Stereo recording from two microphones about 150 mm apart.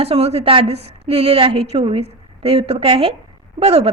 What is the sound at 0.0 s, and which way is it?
A woman's voice, 45° right (ahead or behind).